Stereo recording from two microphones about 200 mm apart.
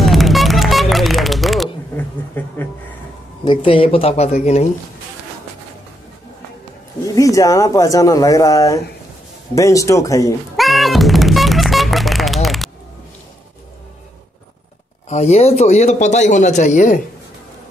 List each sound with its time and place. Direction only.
0.0 s music: centre (ahead or behind)
3.4 s speech: 25° left (ahead or behind)
7.1 s speech: 15° left (ahead or behind)
10.5 s music: centre (ahead or behind)
15.0 s speech: 35° left (ahead or behind)